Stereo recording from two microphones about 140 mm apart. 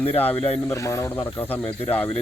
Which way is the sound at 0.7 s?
20° left (ahead or behind).